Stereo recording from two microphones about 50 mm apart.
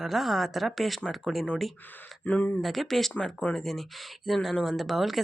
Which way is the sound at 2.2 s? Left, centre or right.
Left.